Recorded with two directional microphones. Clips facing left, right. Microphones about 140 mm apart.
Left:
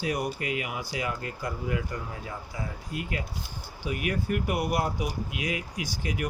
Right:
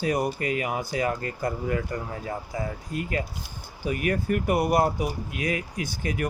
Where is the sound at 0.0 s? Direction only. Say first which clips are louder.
Right 4 dB; 45° right (ahead or behind).